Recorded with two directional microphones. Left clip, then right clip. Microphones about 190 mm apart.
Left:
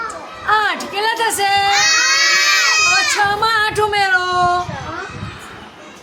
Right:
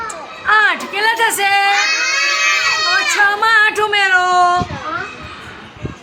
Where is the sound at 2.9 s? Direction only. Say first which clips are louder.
Right 1 dB; 15° left (ahead or behind).